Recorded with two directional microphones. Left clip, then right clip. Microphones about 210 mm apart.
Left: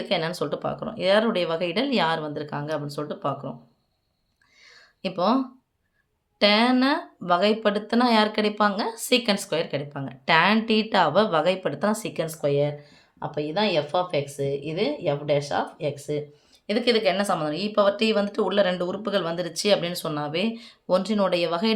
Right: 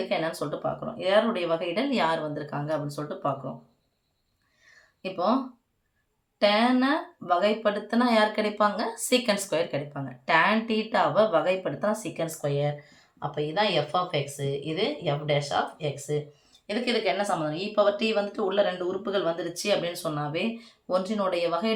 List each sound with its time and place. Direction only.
0.1 s speech: 45° left (ahead or behind)
5.0 s speech: 50° left (ahead or behind)
6.4 s speech: 50° left (ahead or behind)